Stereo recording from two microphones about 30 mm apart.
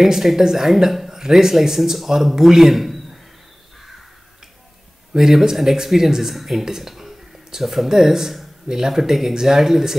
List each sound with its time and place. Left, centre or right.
0.0 s speech: centre
1.8 s speech: centre
2.3 s speech: centre
2.7 s a sound: centre
5.1 s speech: centre